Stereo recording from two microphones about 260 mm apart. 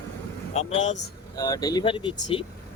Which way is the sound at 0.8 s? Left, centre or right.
Left.